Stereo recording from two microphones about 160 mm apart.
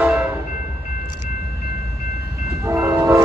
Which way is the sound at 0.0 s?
5° right (ahead or behind).